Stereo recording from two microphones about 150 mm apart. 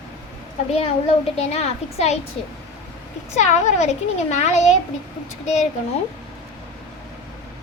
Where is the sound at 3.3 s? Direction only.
50° left (ahead or behind).